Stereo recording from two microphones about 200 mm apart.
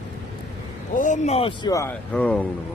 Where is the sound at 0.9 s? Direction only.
40° left (ahead or behind).